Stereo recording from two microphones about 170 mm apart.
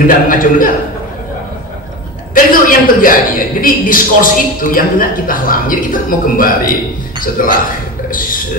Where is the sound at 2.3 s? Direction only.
55° left (ahead or behind).